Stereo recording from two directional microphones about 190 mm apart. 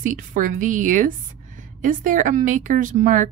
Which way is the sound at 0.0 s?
45° right (ahead or behind).